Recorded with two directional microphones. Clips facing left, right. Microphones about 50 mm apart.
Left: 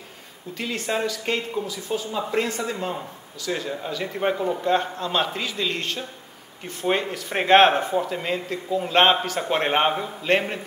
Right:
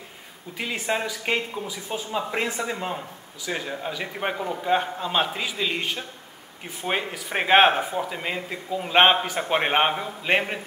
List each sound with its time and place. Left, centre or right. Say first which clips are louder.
0.6 s speech: left 1 dB; centre